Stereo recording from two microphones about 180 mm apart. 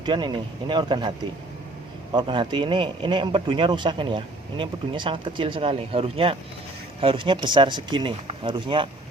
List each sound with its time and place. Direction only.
0.0 s speech: 25° right (ahead or behind)
2.1 s speech: 25° right (ahead or behind)